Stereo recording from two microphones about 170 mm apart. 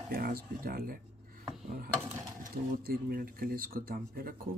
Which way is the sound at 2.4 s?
60° right (ahead or behind).